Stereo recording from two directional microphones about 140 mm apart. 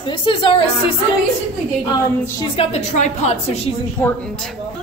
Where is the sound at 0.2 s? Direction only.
40° left (ahead or behind).